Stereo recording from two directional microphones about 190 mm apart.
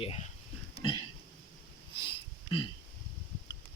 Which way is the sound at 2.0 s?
25° left (ahead or behind).